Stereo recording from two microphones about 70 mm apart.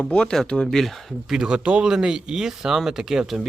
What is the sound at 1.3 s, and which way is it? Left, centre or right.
Speech, centre.